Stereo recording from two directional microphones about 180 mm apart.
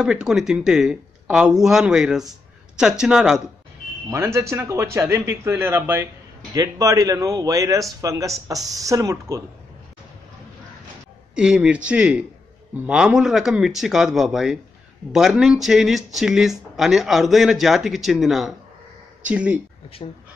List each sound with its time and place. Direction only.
0.0 s speech: 5° right (ahead or behind)
4.1 s a man's voice: 15° right (ahead or behind)
11.3 s speech: 5° right (ahead or behind)